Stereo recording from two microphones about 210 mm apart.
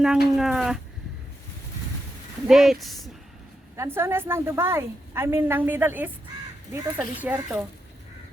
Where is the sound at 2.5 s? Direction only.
Centre (ahead or behind).